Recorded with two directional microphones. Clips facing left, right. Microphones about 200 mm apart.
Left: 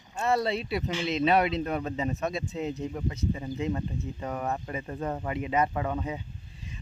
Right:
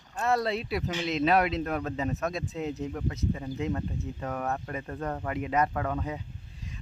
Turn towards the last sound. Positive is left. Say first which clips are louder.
# left 1 dB
turn(degrees=0)  # may be behind; listen again after turning